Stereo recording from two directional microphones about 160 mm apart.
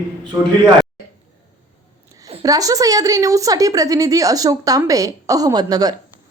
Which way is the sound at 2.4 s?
20° right (ahead or behind).